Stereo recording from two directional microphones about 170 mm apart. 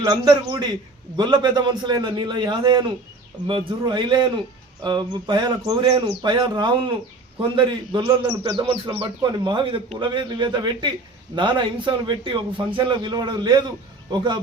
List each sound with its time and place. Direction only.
0.0 s a man's voice: 25° right (ahead or behind)